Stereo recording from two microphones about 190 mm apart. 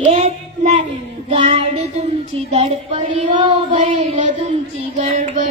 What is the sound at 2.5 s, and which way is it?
Speech, 30° right (ahead or behind).